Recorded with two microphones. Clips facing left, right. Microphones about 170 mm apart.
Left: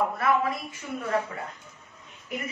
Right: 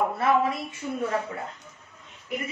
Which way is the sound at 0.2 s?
25° right (ahead or behind).